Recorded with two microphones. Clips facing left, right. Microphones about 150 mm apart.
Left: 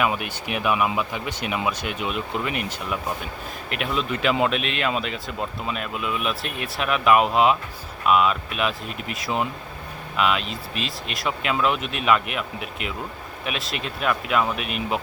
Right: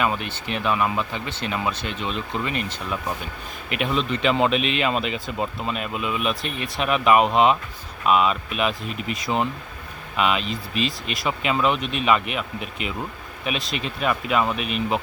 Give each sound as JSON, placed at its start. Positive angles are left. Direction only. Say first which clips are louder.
{"t": 0.0, "sound": "speech", "louder": "even", "side_deg": 10}